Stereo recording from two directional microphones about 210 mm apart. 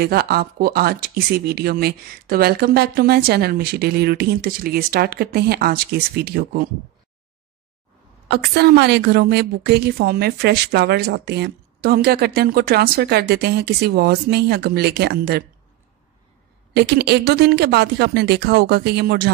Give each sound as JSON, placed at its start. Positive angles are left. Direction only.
{"t": 0.0, "sound": "a woman's voice", "side_deg": -45}
{"t": 8.3, "sound": "a woman's voice", "side_deg": -50}
{"t": 16.7, "sound": "a woman's voice", "side_deg": -50}